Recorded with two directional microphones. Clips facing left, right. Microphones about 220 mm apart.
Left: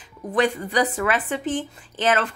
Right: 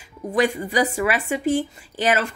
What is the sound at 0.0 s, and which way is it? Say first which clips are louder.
Speech: right 1 dB; 15° right (ahead or behind).